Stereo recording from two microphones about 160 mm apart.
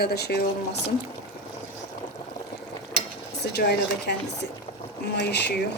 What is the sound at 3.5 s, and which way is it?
Speech, 90° left.